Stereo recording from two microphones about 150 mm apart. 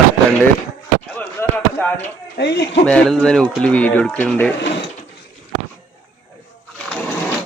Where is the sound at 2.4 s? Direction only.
90° left.